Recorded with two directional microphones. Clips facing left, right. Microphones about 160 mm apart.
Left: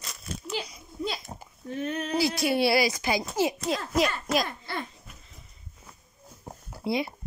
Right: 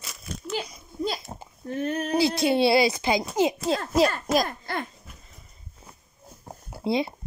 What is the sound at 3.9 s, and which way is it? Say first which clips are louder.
Speech: right 4 dB; 40° right (ahead or behind).